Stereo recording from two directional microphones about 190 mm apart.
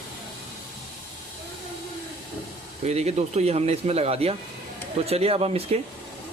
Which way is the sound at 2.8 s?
35° right (ahead or behind).